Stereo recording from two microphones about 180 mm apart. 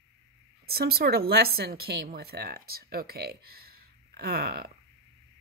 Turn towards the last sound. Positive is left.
turn(degrees=-60)  # may be behind; listen again after turning